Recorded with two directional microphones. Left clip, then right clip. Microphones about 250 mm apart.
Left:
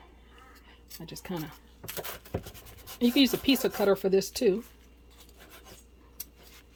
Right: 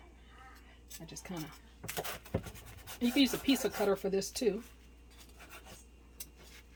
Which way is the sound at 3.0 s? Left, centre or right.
Left.